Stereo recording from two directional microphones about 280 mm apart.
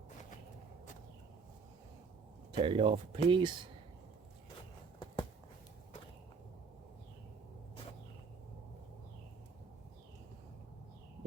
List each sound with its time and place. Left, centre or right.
2.6 s speech: centre